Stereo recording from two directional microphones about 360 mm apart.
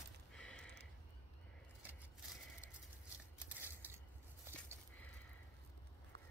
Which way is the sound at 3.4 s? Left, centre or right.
Centre.